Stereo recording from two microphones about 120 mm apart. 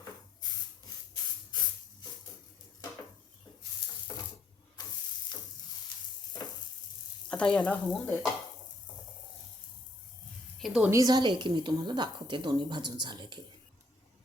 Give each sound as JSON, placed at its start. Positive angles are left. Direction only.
{"t": 4.1, "sound": "a sound", "side_deg": 30}
{"t": 7.3, "sound": "stir", "side_deg": 10}
{"t": 10.6, "sound": "a woman's voice", "side_deg": 0}
{"t": 10.9, "sound": "a woman's voice", "side_deg": -35}